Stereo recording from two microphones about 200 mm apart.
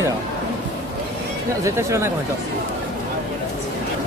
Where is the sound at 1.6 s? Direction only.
15° right (ahead or behind).